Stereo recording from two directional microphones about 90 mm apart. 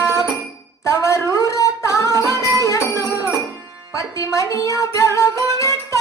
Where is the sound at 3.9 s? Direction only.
35° left (ahead or behind).